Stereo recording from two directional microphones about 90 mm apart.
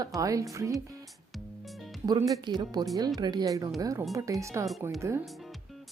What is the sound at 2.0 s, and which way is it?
Speech, 40° right (ahead or behind).